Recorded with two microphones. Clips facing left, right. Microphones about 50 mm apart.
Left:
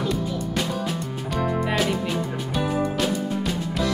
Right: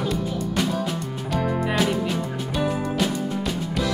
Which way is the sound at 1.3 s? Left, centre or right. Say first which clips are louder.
Even; centre.